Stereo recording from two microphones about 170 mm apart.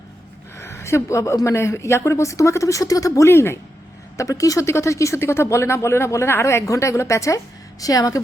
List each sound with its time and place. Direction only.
0.5 s speech: 15° left (ahead or behind)